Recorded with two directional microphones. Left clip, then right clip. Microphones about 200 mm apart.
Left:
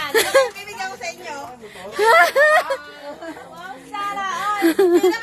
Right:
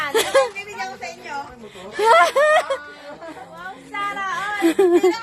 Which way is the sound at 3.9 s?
15° left (ahead or behind).